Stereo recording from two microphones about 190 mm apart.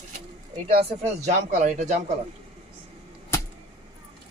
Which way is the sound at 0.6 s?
30° right (ahead or behind).